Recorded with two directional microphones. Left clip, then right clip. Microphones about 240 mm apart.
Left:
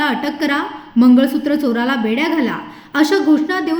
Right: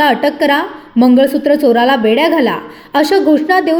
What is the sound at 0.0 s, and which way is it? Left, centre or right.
A woman's voice, centre.